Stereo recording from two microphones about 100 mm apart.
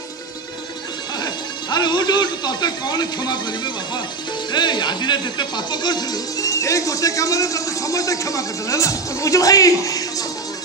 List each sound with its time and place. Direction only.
1.2 s speech: 45° left (ahead or behind)